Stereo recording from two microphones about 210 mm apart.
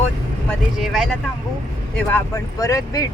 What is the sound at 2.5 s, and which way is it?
Speech, 15° left (ahead or behind).